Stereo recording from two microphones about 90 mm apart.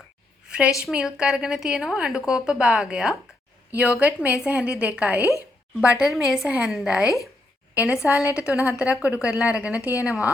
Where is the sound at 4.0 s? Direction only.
15° right (ahead or behind).